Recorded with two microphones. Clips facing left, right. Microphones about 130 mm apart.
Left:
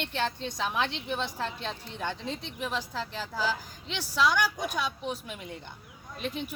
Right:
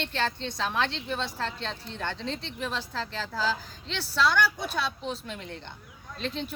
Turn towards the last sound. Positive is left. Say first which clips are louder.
# right 1 dB
turn(degrees=10)  # may be behind; listen again after turning